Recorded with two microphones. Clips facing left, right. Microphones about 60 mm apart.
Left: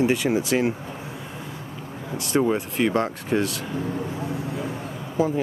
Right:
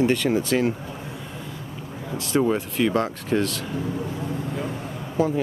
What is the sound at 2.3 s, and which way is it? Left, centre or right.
Speech, centre.